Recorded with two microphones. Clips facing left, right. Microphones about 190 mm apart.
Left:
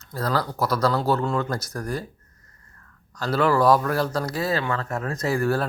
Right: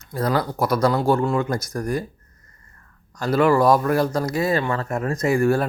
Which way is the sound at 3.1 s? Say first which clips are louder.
Right 4 dB; 10° right (ahead or behind).